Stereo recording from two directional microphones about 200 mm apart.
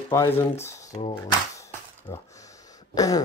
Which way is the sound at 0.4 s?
15° left (ahead or behind).